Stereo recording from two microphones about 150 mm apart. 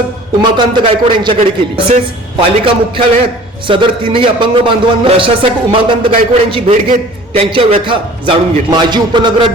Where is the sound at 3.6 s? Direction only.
35° right (ahead or behind).